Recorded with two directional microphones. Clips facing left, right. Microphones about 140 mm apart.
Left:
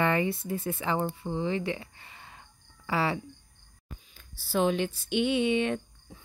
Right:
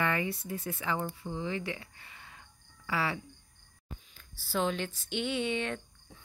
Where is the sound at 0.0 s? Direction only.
30° left (ahead or behind).